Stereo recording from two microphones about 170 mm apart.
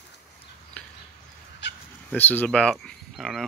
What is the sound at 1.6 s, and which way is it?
Chicken, 90° left.